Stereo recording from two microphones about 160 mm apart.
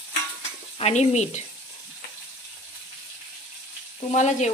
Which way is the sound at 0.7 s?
45° left (ahead or behind).